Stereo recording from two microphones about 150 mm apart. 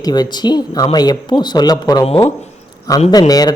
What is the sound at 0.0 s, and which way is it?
Speech, 25° left (ahead or behind).